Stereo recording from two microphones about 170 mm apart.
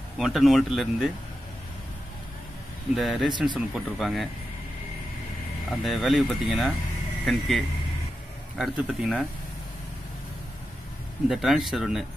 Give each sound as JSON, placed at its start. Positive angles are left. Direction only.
{"t": 0.2, "sound": "speech", "side_deg": 0}
{"t": 3.0, "sound": "speech", "side_deg": 0}
{"t": 3.3, "sound": "speech", "side_deg": -25}
{"t": 3.5, "sound": "speech", "side_deg": 0}
{"t": 5.9, "sound": "speech", "side_deg": 0}
{"t": 11.2, "sound": "speech", "side_deg": 0}